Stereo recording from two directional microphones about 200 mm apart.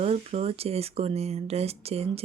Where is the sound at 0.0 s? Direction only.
30° right (ahead or behind).